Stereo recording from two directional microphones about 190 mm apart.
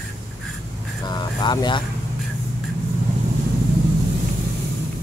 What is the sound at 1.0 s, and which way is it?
Speech, 20° left (ahead or behind).